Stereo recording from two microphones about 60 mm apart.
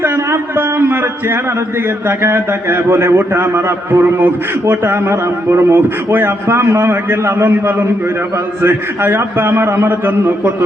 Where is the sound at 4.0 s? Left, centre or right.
Right.